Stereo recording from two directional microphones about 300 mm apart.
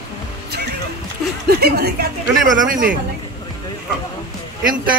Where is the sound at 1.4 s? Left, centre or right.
Right.